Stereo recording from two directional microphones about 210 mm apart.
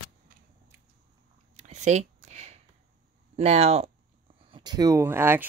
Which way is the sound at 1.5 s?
35° right (ahead or behind).